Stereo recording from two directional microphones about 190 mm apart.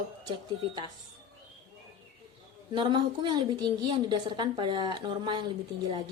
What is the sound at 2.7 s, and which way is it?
A woman's voice, 25° right (ahead or behind).